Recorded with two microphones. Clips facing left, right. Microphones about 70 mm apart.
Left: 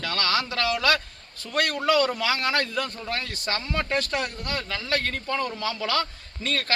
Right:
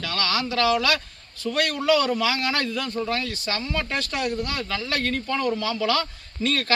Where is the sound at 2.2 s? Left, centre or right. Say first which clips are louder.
Right 1 dB; left.